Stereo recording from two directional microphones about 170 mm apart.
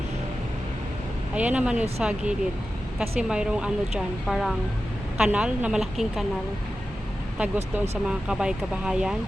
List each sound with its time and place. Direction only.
1.4 s a woman's voice: 5° right (ahead or behind)
7.3 s a woman's voice: 10° right (ahead or behind)